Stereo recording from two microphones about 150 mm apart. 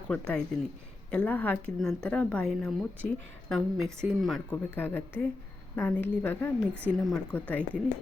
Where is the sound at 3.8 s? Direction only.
15° right (ahead or behind).